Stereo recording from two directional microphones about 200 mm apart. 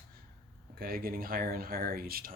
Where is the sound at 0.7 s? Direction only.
50° right (ahead or behind).